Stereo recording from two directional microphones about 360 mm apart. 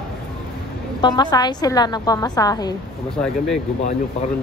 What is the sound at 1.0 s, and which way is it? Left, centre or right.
A woman's voice, centre.